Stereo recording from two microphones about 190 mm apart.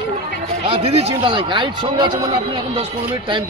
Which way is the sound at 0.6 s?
30° right (ahead or behind).